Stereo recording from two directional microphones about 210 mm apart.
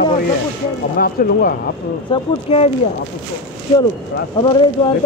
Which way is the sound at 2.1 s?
30° left (ahead or behind).